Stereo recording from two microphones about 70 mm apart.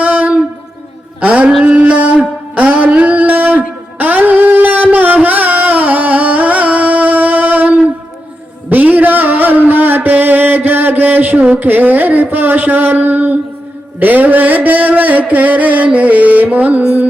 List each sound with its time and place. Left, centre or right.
0.0 s a sound: right
1.2 s mantra: centre
1.6 s music: centre
14.0 s mantra: right